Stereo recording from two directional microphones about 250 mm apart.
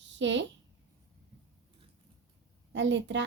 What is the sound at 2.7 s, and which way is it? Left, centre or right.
Speech, right.